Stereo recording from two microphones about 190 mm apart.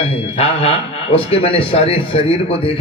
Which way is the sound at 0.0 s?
30° left (ahead or behind).